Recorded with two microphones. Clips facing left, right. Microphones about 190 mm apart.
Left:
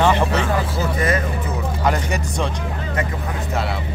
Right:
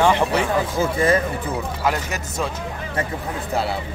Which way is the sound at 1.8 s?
5° right (ahead or behind).